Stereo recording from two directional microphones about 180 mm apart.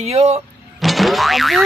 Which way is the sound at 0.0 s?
35° right (ahead or behind).